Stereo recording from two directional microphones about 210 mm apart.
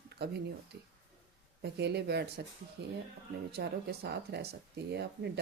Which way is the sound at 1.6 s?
50° right (ahead or behind).